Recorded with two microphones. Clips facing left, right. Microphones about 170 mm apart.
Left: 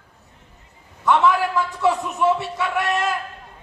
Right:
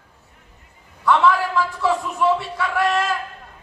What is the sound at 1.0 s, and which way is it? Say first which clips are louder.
A man's voice: even; 20° left (ahead or behind).